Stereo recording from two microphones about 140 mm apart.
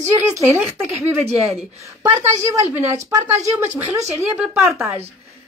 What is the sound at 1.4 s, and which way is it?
Speech, centre (ahead or behind).